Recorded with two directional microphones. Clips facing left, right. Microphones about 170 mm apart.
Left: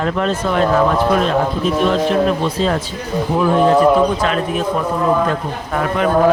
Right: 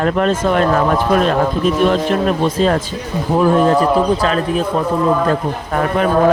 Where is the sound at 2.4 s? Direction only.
50° right (ahead or behind).